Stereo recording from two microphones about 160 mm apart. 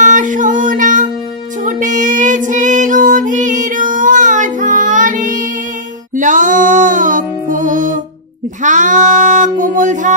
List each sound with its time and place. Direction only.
0.0 s music: 55° right (ahead or behind)
1.6 s child singing: 50° right (ahead or behind)
6.1 s music: 55° right (ahead or behind)